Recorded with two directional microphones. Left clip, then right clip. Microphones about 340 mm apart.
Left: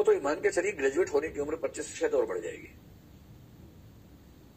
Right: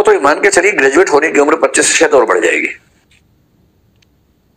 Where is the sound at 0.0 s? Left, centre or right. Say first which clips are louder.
Right 17 dB; right.